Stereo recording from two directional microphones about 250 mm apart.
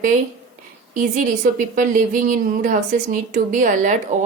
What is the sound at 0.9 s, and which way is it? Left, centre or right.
A woman's voice, right.